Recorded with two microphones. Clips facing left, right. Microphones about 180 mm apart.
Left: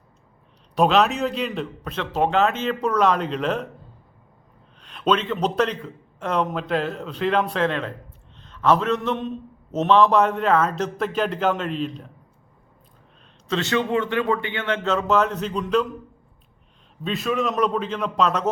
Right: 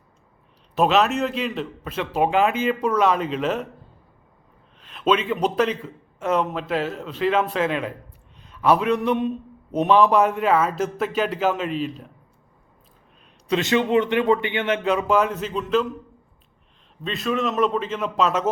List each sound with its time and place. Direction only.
0.8 s a man's voice: centre (ahead or behind)
4.8 s a man's voice: 5° right (ahead or behind)
13.5 s speech: 15° right (ahead or behind)
17.0 s a man's voice: centre (ahead or behind)